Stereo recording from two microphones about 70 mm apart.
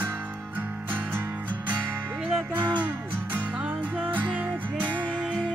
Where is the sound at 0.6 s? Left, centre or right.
Right.